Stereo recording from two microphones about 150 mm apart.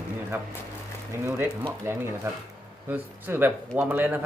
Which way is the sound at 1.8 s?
15° right (ahead or behind).